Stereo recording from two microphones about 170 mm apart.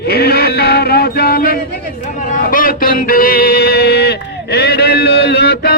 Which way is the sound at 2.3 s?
55° left (ahead or behind).